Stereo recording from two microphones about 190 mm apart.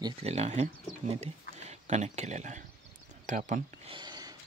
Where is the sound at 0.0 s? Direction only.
35° right (ahead or behind).